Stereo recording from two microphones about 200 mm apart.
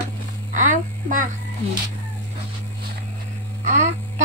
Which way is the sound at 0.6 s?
40° right (ahead or behind).